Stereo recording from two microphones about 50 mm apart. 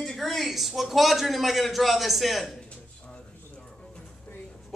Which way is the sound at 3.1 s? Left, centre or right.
Left.